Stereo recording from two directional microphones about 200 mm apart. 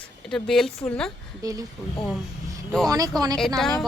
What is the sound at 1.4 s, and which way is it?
Speech, 15° right (ahead or behind).